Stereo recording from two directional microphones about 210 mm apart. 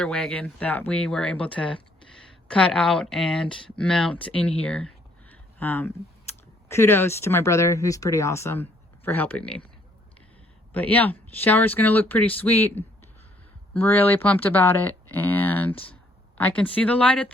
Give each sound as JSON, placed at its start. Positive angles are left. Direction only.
{"t": 0.0, "sound": "speech", "side_deg": 5}
{"t": 5.3, "sound": "a sound", "side_deg": 10}
{"t": 6.7, "sound": "speech", "side_deg": 10}
{"t": 10.7, "sound": "speech", "side_deg": 10}